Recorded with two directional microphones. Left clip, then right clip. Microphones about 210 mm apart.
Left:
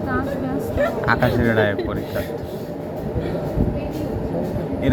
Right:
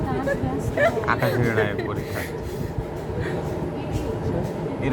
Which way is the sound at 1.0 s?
20° left (ahead or behind).